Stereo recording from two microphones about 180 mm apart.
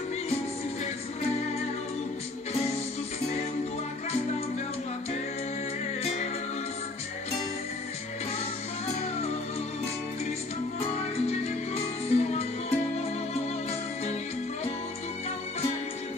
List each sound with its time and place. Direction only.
11.1 s music: 35° left (ahead or behind)